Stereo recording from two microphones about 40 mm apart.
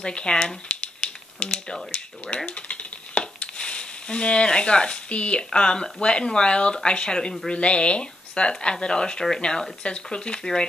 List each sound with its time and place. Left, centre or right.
0.0 s a woman's voice: left
0.7 s a sound: left
2.0 s a woman's voice: left